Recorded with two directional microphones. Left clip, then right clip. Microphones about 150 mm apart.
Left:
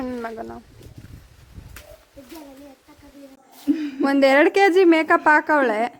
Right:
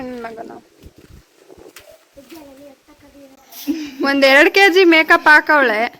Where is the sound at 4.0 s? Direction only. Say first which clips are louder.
Right 5 dB; 5° left (ahead or behind).